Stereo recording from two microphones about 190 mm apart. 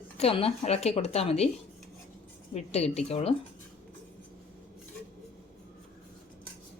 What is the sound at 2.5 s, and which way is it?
Speech, 35° left (ahead or behind).